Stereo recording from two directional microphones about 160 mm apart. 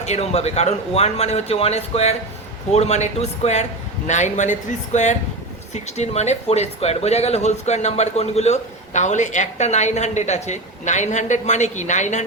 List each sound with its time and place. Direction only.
0.0 s speech: 40° left (ahead or behind)